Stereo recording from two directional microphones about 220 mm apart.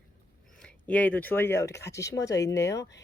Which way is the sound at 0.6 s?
5° left (ahead or behind).